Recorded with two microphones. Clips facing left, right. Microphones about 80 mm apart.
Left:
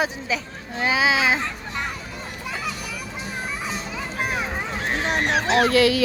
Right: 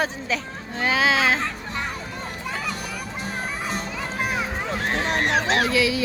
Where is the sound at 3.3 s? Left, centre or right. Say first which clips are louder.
Right 1 dB; right.